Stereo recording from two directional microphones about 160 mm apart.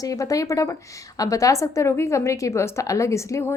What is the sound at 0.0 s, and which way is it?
A woman's voice, 20° left (ahead or behind).